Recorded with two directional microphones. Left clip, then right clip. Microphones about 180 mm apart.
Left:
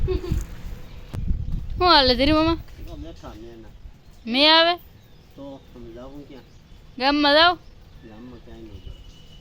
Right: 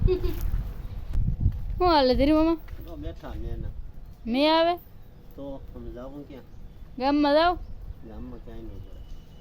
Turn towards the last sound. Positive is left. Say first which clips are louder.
# left 5 dB
turn(degrees=-5)  # may be behind; listen again after turning